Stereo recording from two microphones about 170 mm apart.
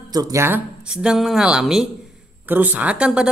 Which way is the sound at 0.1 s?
20° right (ahead or behind).